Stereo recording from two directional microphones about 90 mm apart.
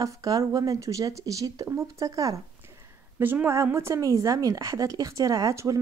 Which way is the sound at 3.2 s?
25° right (ahead or behind).